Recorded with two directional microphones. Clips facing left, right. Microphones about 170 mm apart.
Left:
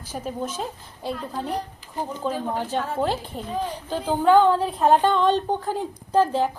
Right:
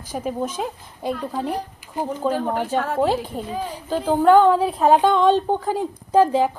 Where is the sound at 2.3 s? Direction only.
60° right (ahead or behind).